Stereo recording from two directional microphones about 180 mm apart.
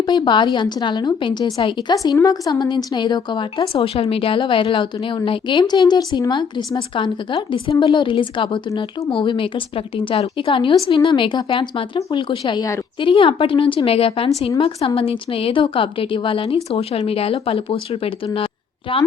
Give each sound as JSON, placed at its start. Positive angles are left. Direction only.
{"t": 0.0, "sound": "a woman's voice", "side_deg": 25}